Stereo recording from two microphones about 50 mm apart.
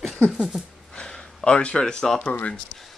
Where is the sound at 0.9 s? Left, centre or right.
Centre.